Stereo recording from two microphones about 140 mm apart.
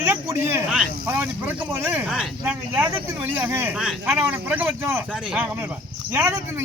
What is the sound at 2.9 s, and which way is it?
Speech, 15° right (ahead or behind).